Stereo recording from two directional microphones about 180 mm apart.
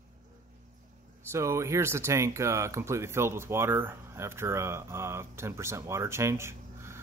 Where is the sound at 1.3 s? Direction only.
15° right (ahead or behind).